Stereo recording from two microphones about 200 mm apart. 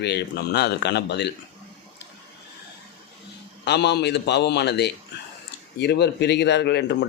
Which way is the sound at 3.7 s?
55° left (ahead or behind).